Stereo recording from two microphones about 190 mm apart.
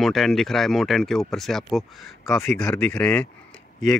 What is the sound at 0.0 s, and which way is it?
Speech, centre (ahead or behind).